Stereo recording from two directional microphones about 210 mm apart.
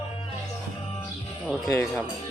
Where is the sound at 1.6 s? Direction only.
15° left (ahead or behind).